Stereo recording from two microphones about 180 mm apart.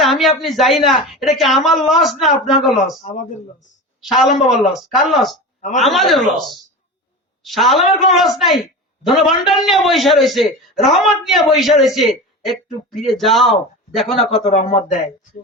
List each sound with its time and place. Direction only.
0.0 s a man's voice: centre (ahead or behind)
3.0 s speech: 45° left (ahead or behind)
4.0 s a man's voice: centre (ahead or behind)
5.5 s speech: 40° left (ahead or behind)
5.8 s a man's voice: centre (ahead or behind)
7.4 s a man's voice: centre (ahead or behind)
14.3 s speech: 35° left (ahead or behind)